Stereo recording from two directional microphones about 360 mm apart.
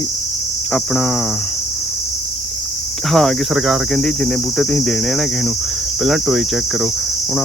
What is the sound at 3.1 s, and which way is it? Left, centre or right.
Speech, centre.